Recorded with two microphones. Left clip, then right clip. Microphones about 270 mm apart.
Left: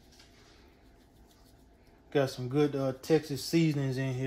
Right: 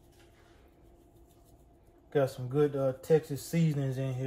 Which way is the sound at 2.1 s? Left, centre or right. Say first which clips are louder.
Even; left.